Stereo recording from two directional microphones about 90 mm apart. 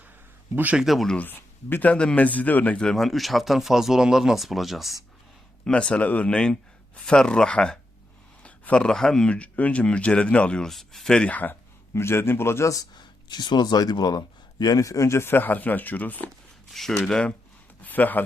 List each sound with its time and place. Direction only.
0.5 s speech: 20° right (ahead or behind)
0.8 s a man's voice: centre (ahead or behind)
1.1 s a man's voice: 20° left (ahead or behind); by 4.9 s centre (ahead or behind)
5.6 s speech: 10° left (ahead or behind)
11.9 s speech: 30° left (ahead or behind)
12.9 s speech: 55° left (ahead or behind); by 16.3 s 20° left (ahead or behind)
16.7 s a man's voice: centre (ahead or behind)
17.1 s speech: 10° left (ahead or behind)